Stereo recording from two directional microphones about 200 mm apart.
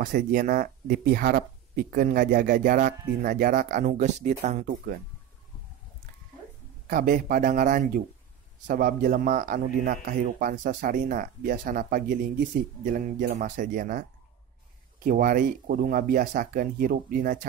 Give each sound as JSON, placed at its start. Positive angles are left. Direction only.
{"t": 0.0, "sound": "speech", "side_deg": -40}
{"t": 6.9, "sound": "speech", "side_deg": -40}